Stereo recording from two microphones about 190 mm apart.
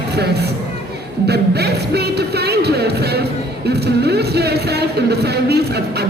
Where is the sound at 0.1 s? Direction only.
60° right (ahead or behind).